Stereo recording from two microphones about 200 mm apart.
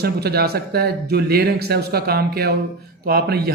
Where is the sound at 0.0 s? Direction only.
50° right (ahead or behind).